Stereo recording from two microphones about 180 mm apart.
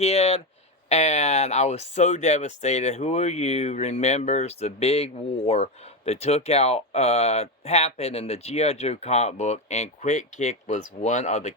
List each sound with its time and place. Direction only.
0.0 s speech: 35° left (ahead or behind)